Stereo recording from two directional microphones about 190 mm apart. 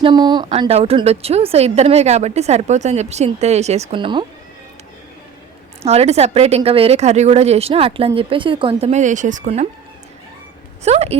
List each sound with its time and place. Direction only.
0.0 s a woman's voice: 20° right (ahead or behind)
5.8 s a woman's voice: 35° right (ahead or behind)
10.8 s a woman's voice: 35° right (ahead or behind)